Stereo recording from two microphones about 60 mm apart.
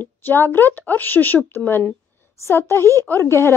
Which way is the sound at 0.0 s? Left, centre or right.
Left.